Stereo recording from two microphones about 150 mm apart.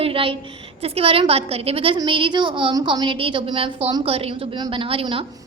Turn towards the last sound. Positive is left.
turn(degrees=-35)  # may be behind; listen again after turning